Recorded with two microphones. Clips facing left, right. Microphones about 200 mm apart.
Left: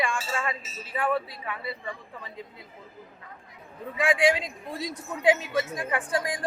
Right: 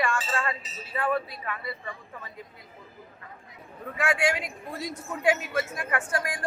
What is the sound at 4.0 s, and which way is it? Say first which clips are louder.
Speech: left 3 dB; 15° left (ahead or behind).